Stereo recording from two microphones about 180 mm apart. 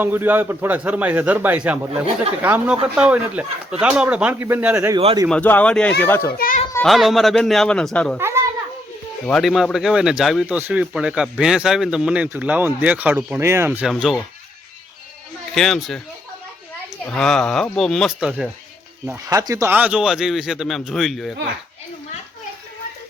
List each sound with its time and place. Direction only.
0.0 s speech: 10° right (ahead or behind)
4.9 s speech: 30° right (ahead or behind)
5.3 s speech: 10° left (ahead or behind)
6.3 s a child's voice: 55° left (ahead or behind)
6.8 s speech: centre (ahead or behind)
9.2 s speech: 5° left (ahead or behind)
15.5 s speech: centre (ahead or behind)
17.1 s speech: 5° left (ahead or behind)
19.0 s speech: 15° right (ahead or behind); by 21.3 s centre (ahead or behind)